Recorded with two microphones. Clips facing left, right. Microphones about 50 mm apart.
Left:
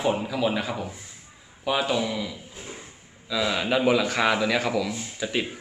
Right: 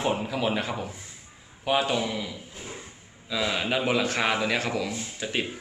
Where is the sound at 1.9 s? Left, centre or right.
Right.